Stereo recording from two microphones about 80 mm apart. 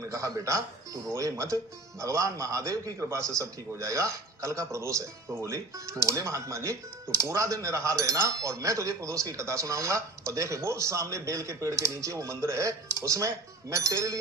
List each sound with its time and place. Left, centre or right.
0.1 s speech: right